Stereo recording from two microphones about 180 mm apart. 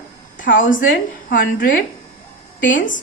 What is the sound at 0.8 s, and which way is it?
Speech, 90° left.